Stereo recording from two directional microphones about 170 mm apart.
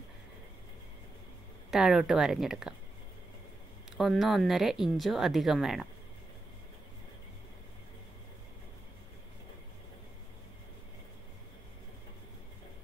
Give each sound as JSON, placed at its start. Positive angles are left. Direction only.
{"t": 1.7, "sound": "speech", "side_deg": 0}
{"t": 3.9, "sound": "speech", "side_deg": 0}